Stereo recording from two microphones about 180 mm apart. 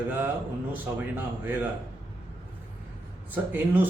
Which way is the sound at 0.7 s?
10° right (ahead or behind).